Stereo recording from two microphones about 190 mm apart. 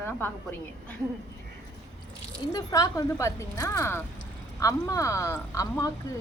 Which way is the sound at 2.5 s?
20° left (ahead or behind).